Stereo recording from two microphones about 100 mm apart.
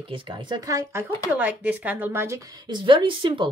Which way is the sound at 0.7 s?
30° right (ahead or behind).